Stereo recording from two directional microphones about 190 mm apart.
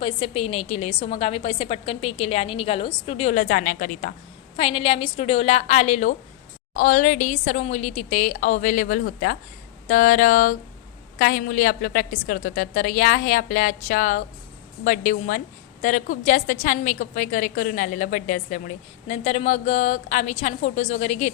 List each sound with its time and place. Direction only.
0.0 s a woman's voice: 30° left (ahead or behind); by 4.1 s 45° left (ahead or behind)
4.5 s a woman's voice: 30° left (ahead or behind)